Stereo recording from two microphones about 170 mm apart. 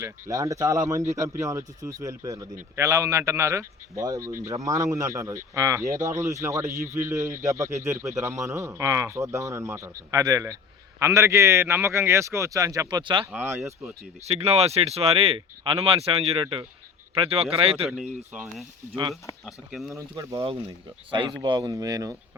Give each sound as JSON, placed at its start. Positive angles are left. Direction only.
{"t": 0.0, "sound": "a man's voice", "side_deg": -20}
{"t": 4.2, "sound": "speech", "side_deg": -55}
{"t": 4.4, "sound": "a man's voice", "side_deg": -20}
{"t": 13.3, "sound": "a man's voice", "side_deg": -10}
{"t": 14.3, "sound": "speech", "side_deg": -35}
{"t": 18.3, "sound": "speech", "side_deg": -5}
{"t": 20.0, "sound": "a man's voice", "side_deg": -15}
{"t": 21.4, "sound": "speech", "side_deg": -20}